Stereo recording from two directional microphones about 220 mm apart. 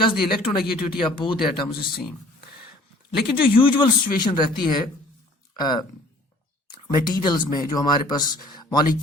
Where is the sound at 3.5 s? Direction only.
20° left (ahead or behind).